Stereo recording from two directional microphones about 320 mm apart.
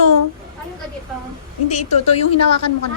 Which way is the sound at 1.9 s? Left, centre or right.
Centre.